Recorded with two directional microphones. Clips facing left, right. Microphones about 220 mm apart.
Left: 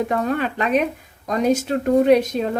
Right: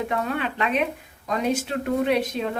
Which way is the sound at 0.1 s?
40° left (ahead or behind).